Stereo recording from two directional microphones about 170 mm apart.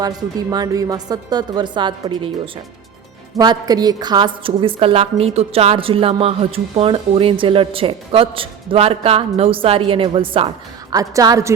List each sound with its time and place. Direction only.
0.0 s a woman's voice: 25° right (ahead or behind)
3.3 s a woman's voice: 25° right (ahead or behind)
10.9 s a woman's voice: 20° right (ahead or behind)